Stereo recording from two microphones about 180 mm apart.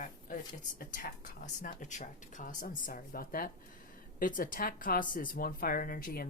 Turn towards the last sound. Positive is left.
turn(degrees=55)  # may be behind; listen again after turning